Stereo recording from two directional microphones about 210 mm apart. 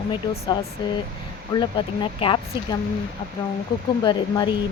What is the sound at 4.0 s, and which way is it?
Speech, 20° left (ahead or behind).